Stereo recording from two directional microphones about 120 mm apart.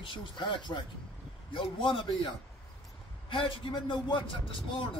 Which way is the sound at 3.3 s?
45° left (ahead or behind).